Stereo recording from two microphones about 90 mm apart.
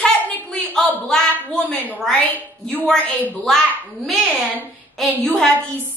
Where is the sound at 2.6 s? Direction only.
5° left (ahead or behind).